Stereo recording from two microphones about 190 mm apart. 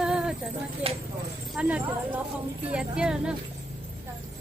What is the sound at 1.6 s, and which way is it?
Speech, 5° right (ahead or behind).